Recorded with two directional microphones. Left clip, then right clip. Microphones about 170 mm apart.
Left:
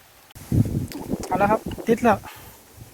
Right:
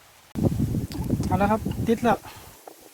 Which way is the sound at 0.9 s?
20° left (ahead or behind).